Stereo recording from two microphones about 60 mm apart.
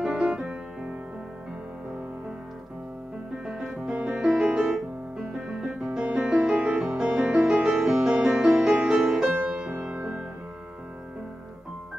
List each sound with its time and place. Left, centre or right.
0.0 s music: centre
3.4 s music: centre